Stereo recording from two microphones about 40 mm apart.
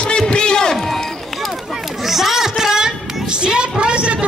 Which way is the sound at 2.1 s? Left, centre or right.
Centre.